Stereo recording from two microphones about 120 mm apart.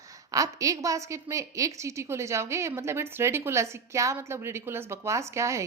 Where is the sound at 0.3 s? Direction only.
30° right (ahead or behind).